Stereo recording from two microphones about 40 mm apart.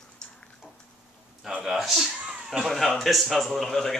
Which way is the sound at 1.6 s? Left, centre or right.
Centre.